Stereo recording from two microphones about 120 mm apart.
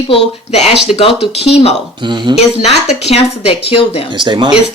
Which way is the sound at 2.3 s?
40° right (ahead or behind).